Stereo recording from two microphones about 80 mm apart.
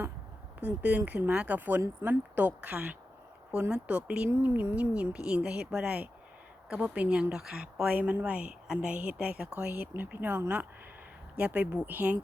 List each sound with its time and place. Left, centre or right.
0.6 s speech: centre
9.6 s speech: right